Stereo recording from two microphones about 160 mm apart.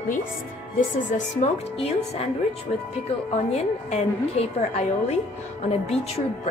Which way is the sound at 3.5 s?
45° left (ahead or behind).